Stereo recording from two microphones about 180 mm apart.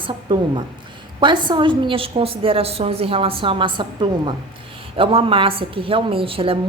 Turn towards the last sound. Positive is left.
turn(degrees=-30)  # may be behind; listen again after turning